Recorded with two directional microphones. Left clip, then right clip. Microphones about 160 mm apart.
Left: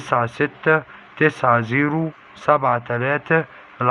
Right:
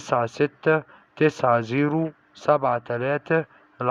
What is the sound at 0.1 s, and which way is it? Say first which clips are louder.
A man's voice: left 3 dB; 50° right (ahead or behind).